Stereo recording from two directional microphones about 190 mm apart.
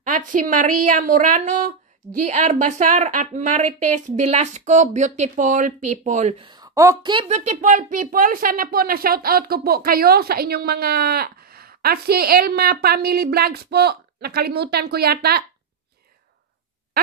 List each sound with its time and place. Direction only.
0.0 s a woman's voice: 45° right (ahead or behind)